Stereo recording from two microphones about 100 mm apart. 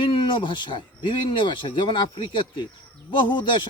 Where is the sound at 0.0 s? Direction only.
60° left (ahead or behind).